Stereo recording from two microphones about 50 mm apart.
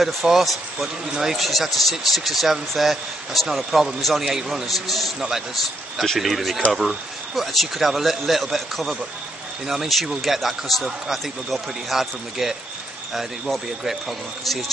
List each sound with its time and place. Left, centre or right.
0.0 s speech: centre
6.1 s speech: centre